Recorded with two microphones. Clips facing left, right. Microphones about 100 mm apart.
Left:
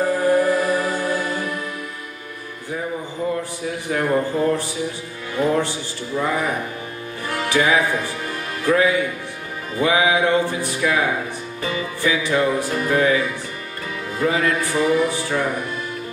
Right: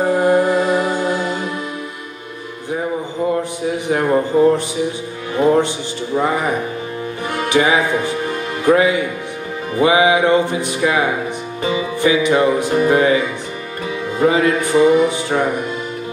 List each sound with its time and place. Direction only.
0.0 s music: 20° right (ahead or behind)
3.7 s music: 20° right (ahead or behind)